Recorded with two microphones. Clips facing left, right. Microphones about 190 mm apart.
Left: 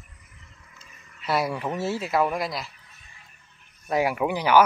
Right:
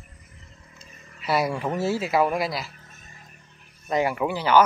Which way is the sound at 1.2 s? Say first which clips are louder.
Right 2 dB; centre (ahead or behind).